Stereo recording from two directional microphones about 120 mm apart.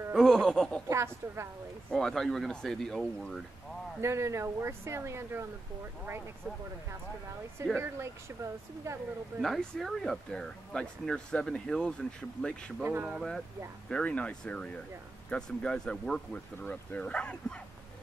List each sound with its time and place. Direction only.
0.1 s speech: 5° left (ahead or behind)
0.8 s speech: 25° right (ahead or behind)
1.9 s speech: 5° left (ahead or behind)
4.0 s speech: 25° right (ahead or behind)
7.7 s speech: 20° right (ahead or behind)
9.4 s speech: centre (ahead or behind)
12.8 s speech: 15° right (ahead or behind)
13.8 s speech: 10° left (ahead or behind)